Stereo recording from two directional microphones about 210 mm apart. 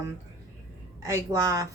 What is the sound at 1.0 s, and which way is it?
Speech, 15° right (ahead or behind).